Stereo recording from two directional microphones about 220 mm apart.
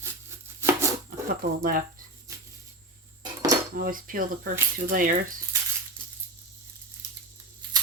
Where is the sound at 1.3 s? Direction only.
40° right (ahead or behind).